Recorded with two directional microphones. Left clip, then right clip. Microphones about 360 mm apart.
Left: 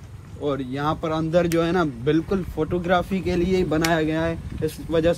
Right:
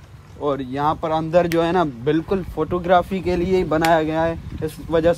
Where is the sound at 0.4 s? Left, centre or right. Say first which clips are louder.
Right 4 dB; centre.